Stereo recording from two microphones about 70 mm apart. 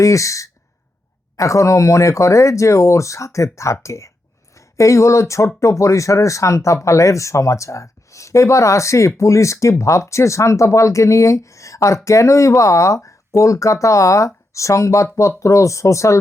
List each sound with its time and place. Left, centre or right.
0.0 s speech: left